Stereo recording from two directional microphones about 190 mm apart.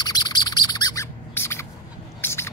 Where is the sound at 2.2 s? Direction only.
15° left (ahead or behind).